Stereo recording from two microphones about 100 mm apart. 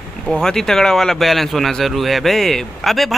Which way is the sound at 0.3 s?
5° left (ahead or behind).